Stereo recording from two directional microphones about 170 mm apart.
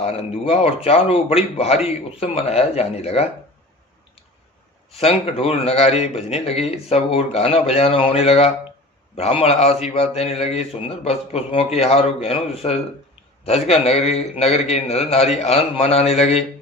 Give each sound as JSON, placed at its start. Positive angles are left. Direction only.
{"t": 0.0, "sound": "a man's voice", "side_deg": 35}
{"t": 4.9, "sound": "a man's voice", "side_deg": 35}